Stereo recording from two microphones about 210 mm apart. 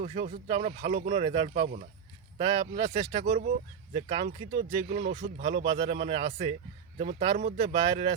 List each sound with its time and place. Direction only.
0.0 s speech: 30° right (ahead or behind)
2.4 s speech: 25° right (ahead or behind)